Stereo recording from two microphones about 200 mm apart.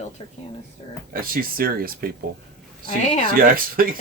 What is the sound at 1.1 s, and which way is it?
Speech, 45° right (ahead or behind).